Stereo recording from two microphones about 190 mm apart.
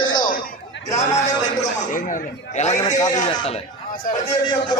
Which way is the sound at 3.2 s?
30° left (ahead or behind).